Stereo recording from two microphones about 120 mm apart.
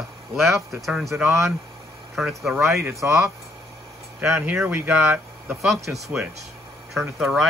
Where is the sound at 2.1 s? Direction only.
Centre (ahead or behind).